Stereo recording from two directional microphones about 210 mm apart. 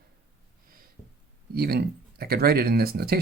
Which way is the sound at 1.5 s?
50° right (ahead or behind).